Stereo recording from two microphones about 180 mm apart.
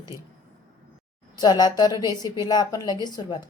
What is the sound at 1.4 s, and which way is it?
Speech, 20° left (ahead or behind).